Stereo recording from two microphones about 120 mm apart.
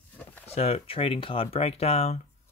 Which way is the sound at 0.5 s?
60° left (ahead or behind).